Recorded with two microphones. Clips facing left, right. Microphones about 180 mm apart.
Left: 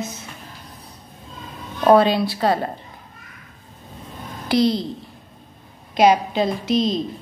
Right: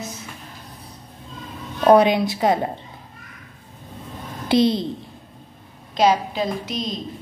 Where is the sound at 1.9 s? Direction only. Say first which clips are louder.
Even; 15° right (ahead or behind).